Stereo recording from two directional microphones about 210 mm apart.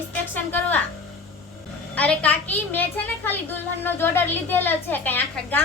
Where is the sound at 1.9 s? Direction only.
5° left (ahead or behind).